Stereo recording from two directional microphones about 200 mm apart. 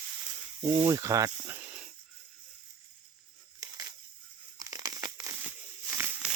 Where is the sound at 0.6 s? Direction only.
20° right (ahead or behind).